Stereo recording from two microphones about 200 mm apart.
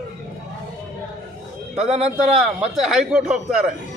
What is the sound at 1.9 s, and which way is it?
Speech, 30° right (ahead or behind).